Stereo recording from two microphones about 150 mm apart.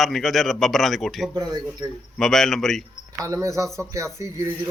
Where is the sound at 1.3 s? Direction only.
30° right (ahead or behind).